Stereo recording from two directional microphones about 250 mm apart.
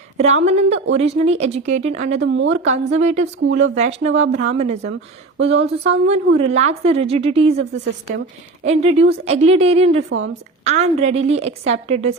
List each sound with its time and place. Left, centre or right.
0.2 s a woman's voice: right
2.2 s a woman's voice: right
2.8 s a woman's voice: right
8.6 s a woman's voice: right
10.1 s a woman's voice: right
10.6 s a woman's voice: right